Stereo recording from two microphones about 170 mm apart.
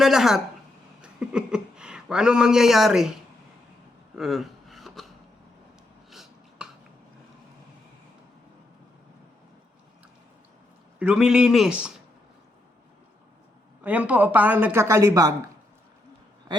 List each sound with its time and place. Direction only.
0.0 s speech: centre (ahead or behind)
4.1 s a sound: centre (ahead or behind)
11.0 s speech: 5° right (ahead or behind)
13.8 s speech: 10° right (ahead or behind)